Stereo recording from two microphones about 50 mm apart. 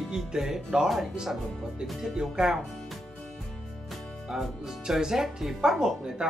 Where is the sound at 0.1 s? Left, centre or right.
Centre.